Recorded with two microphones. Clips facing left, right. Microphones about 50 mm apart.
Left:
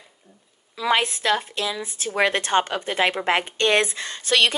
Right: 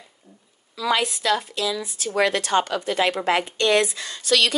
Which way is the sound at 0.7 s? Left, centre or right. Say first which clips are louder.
Left 1 dB; left.